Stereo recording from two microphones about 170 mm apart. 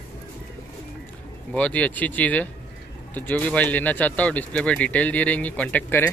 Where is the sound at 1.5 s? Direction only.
10° left (ahead or behind).